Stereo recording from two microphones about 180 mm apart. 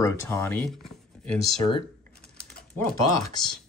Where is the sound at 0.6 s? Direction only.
5° left (ahead or behind).